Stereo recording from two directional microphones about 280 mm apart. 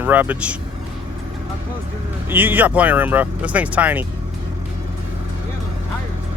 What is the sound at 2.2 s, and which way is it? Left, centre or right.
Speech, centre.